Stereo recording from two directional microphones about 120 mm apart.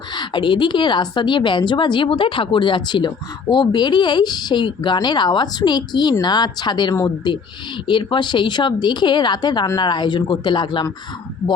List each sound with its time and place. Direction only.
0.1 s a woman's voice: 40° left (ahead or behind)
7.9 s a woman's voice: 40° left (ahead or behind)